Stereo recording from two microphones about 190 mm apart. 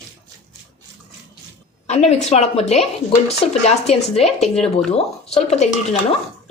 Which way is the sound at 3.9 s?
35° left (ahead or behind).